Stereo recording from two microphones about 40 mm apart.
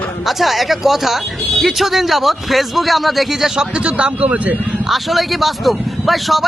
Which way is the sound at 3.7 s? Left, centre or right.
Right.